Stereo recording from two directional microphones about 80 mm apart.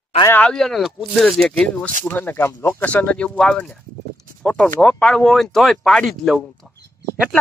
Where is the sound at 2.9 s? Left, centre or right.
Centre.